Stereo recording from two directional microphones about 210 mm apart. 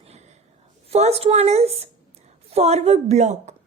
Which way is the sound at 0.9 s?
30° right (ahead or behind).